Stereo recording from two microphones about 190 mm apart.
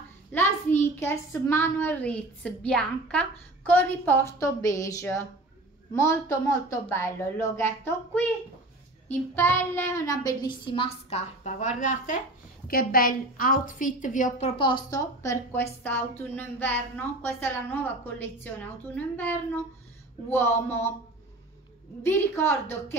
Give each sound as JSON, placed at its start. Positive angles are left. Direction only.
{"t": 0.3, "sound": "a woman's voice", "side_deg": 10}
{"t": 9.3, "sound": "a child's voice", "side_deg": 10}
{"t": 14.6, "sound": "a woman's voice", "side_deg": 25}
{"t": 22.0, "sound": "a woman's voice", "side_deg": 15}